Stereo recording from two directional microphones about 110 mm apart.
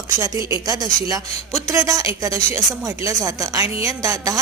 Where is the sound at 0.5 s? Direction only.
35° right (ahead or behind).